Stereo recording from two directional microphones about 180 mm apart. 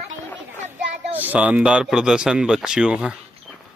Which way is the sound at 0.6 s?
40° right (ahead or behind).